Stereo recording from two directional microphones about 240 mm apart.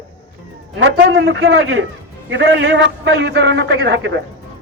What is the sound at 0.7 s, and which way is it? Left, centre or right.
A man's voice, right.